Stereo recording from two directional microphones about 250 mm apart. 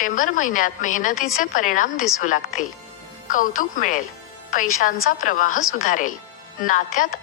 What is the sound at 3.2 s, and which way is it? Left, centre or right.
Speech, left.